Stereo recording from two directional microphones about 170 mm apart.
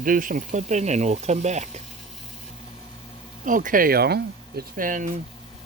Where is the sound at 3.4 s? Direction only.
50° right (ahead or behind).